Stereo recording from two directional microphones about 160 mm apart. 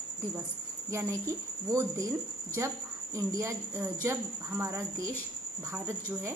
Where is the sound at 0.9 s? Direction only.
15° right (ahead or behind).